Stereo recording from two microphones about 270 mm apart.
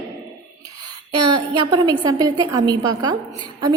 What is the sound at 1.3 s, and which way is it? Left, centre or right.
A woman's voice, centre.